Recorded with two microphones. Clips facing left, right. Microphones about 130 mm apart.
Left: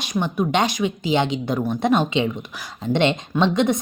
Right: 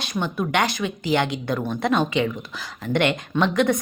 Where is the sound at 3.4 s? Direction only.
20° left (ahead or behind).